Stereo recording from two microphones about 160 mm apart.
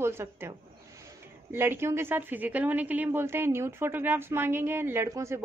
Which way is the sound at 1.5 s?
15° right (ahead or behind).